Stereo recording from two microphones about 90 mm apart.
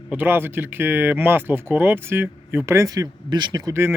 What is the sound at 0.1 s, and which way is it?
Speech, 20° right (ahead or behind).